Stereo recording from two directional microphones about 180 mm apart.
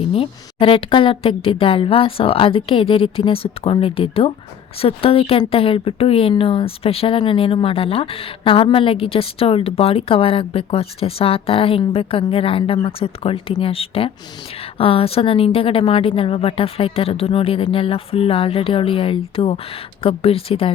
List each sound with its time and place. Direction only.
0.1 s speech: 30° left (ahead or behind)